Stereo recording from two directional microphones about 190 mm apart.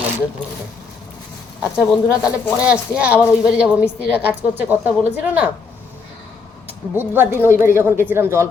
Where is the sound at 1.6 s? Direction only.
5° right (ahead or behind).